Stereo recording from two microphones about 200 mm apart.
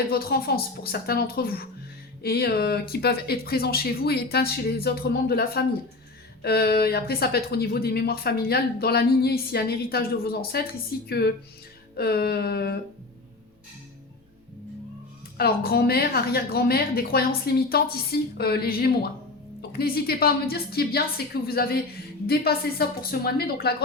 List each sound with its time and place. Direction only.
0.1 s speech: 50° left (ahead or behind)
15.4 s speech: 50° left (ahead or behind)